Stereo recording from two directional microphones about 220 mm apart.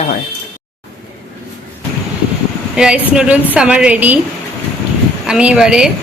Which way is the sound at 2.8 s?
5° right (ahead or behind).